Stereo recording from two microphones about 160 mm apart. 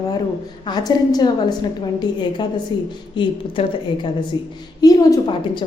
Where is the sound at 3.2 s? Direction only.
35° left (ahead or behind).